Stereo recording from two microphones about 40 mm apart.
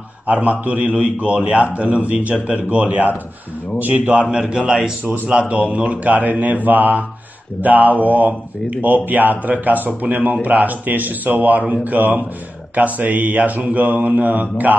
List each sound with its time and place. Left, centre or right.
0.3 s mantra: right
3.7 s speech: right
4.1 s a man's voice: right
5.0 s speech: right
5.4 s mantra: right
7.6 s speech: right
12.7 s mantra: right